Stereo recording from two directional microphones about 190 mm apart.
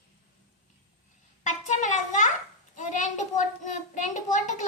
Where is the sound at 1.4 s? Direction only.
40° left (ahead or behind).